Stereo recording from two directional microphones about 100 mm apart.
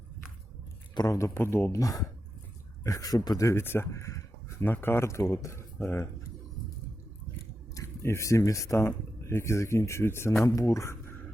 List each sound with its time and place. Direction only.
0.9 s speech: 35° left (ahead or behind)
4.6 s speech: 20° left (ahead or behind)
7.8 s speech: 30° left (ahead or behind)